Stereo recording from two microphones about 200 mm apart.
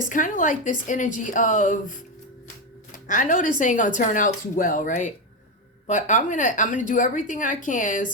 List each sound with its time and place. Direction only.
0.1 s a woman's voice: 40° left (ahead or behind)
3.1 s a woman's voice: 40° left (ahead or behind)